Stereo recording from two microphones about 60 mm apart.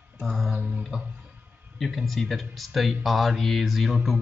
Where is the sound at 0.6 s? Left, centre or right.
Right.